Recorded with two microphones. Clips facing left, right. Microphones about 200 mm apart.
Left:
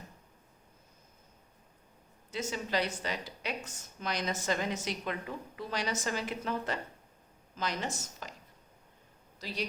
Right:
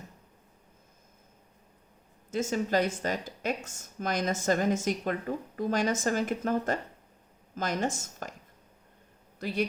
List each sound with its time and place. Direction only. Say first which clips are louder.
2.3 s a woman's voice: right 6 dB; 45° right (ahead or behind)
9.4 s a woman's voice: right 8 dB; 55° right (ahead or behind)